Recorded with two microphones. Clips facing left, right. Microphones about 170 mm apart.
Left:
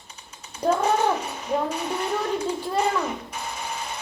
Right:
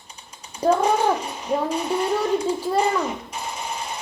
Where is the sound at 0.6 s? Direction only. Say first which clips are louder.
Right 3 dB; 10° right (ahead or behind).